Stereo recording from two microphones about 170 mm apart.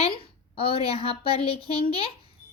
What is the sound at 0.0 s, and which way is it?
A woman's voice, 35° left (ahead or behind).